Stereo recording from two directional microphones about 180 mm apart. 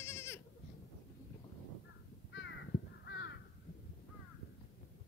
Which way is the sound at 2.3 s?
75° left (ahead or behind).